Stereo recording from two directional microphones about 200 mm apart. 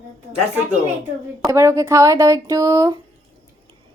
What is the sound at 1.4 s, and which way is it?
Speech, 15° right (ahead or behind).